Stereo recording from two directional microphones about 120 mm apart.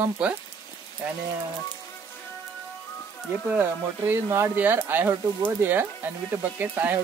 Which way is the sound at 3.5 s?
15° right (ahead or behind).